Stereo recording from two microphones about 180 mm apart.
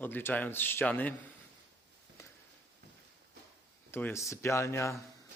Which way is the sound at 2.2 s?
15° left (ahead or behind).